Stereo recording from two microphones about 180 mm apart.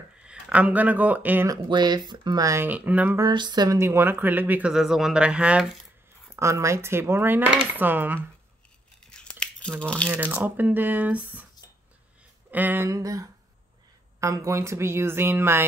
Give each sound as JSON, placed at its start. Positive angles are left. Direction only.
{"t": 0.2, "sound": "speech", "side_deg": -5}
{"t": 1.7, "sound": "speech", "side_deg": -25}
{"t": 3.3, "sound": "speech", "side_deg": -25}
{"t": 6.3, "sound": "speech", "side_deg": -15}
{"t": 9.1, "sound": "tearing", "side_deg": 5}
{"t": 9.8, "sound": "speech", "side_deg": 5}
{"t": 10.0, "sound": "speech", "side_deg": -10}
{"t": 12.4, "sound": "speech", "side_deg": -10}